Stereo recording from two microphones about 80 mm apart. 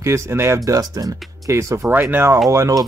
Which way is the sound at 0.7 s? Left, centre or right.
Right.